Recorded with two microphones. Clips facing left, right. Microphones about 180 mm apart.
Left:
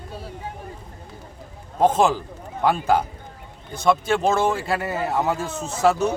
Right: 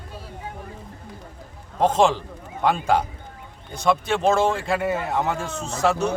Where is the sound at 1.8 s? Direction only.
5° left (ahead or behind).